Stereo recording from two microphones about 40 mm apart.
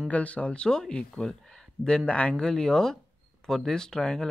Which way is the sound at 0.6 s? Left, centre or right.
Centre.